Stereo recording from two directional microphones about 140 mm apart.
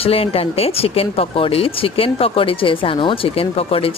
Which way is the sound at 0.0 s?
45° left (ahead or behind).